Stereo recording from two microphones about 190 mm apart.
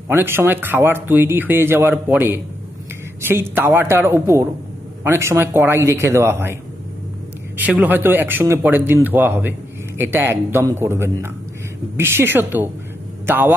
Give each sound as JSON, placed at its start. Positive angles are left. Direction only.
{"t": 0.1, "sound": "speech", "side_deg": -10}
{"t": 7.5, "sound": "speech", "side_deg": -10}